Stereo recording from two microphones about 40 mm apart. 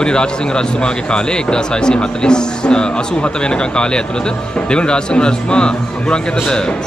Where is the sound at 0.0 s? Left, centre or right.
Left.